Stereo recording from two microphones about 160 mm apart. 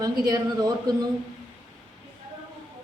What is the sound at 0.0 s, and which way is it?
Speech, 25° right (ahead or behind).